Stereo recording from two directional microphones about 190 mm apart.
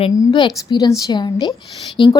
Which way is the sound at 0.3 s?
25° left (ahead or behind).